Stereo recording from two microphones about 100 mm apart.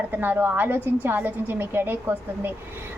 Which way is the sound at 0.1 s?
20° right (ahead or behind).